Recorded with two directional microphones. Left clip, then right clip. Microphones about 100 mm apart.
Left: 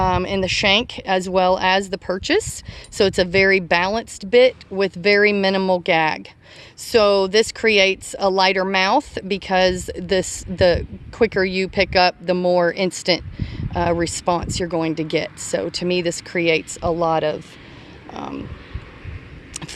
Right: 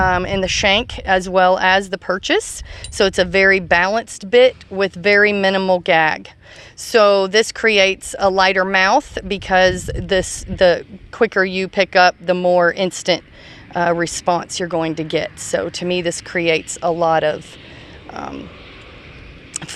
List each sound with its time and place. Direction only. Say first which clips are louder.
0.0 s speech: right 3 dB; 20° left (ahead or behind)